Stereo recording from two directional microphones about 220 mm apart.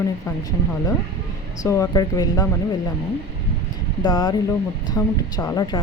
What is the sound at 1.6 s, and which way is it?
Speech, 15° left (ahead or behind).